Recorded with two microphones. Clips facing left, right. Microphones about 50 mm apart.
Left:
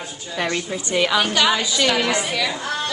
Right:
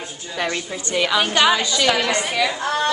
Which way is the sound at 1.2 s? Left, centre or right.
Centre.